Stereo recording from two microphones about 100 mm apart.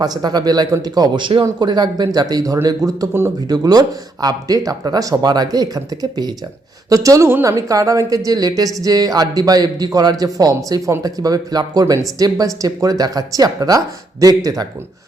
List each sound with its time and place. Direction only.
0.0 s a woman's voice: 45° right (ahead or behind)